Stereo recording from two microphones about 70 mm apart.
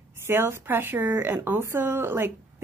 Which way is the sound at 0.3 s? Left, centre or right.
Right.